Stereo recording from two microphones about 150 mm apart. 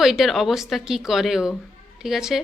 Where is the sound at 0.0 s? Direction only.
Centre (ahead or behind).